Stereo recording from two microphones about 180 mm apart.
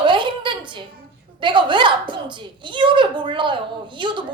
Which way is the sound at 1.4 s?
25° right (ahead or behind).